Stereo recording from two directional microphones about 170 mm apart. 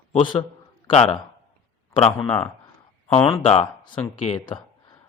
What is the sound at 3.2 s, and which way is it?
Speech, 30° left (ahead or behind).